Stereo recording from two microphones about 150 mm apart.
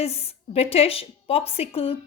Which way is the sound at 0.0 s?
40° left (ahead or behind).